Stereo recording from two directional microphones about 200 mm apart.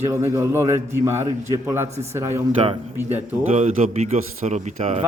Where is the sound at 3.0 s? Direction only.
10° right (ahead or behind).